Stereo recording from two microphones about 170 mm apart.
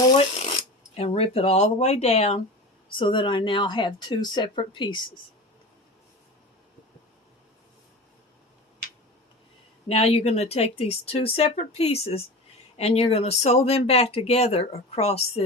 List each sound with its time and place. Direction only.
0.2 s speech: 35° left (ahead or behind)
9.9 s speech: 35° left (ahead or behind)